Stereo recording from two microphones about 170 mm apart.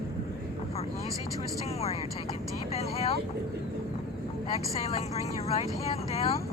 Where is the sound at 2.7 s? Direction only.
40° left (ahead or behind).